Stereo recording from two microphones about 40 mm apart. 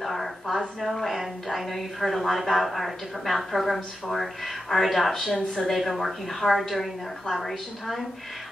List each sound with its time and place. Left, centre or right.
0.0 s a woman's voice: centre